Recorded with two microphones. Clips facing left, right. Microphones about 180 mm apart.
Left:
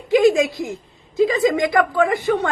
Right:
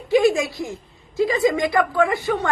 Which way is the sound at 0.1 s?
20° left (ahead or behind).